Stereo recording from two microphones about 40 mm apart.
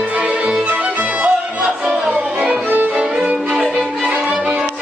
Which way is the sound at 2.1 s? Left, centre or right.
Right.